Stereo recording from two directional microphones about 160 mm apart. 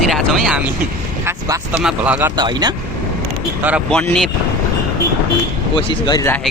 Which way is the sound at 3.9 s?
5° left (ahead or behind).